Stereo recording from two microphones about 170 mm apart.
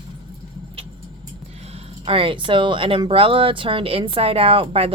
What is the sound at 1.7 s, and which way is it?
Speech, 30° right (ahead or behind).